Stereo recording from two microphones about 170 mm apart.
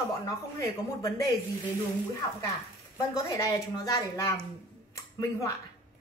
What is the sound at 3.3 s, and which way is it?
Speech, 20° left (ahead or behind).